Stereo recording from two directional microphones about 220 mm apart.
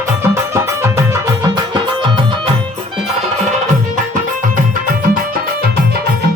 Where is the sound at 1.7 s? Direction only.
20° right (ahead or behind).